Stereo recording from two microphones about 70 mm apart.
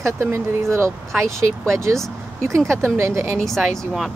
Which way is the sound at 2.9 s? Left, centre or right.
Right.